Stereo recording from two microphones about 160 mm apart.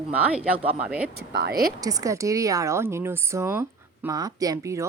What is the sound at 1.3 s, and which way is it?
Speech, 80° right.